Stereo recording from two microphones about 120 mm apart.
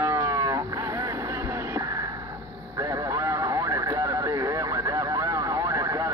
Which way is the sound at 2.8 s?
30° right (ahead or behind).